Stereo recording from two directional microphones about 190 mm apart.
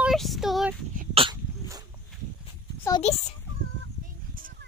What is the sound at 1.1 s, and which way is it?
Dog, 30° right (ahead or behind).